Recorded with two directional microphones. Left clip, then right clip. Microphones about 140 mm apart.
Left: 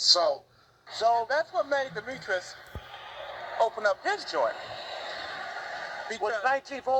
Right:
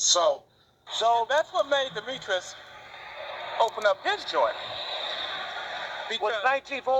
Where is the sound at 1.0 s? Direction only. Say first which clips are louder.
Right 2 dB; 15° left (ahead or behind).